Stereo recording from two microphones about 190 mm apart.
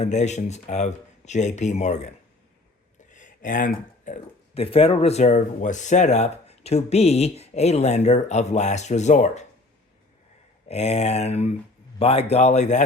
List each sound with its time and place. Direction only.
0.0 s speech: 35° left (ahead or behind)
3.1 s speech: 40° left (ahead or behind)
10.7 s speech: 35° left (ahead or behind)